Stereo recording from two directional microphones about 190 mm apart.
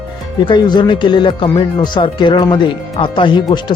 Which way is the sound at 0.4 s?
25° left (ahead or behind).